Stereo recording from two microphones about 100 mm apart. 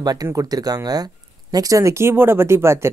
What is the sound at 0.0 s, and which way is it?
Speech, 40° right (ahead or behind).